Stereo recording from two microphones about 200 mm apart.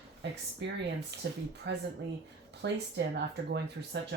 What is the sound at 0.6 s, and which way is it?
Speech, 60° right (ahead or behind).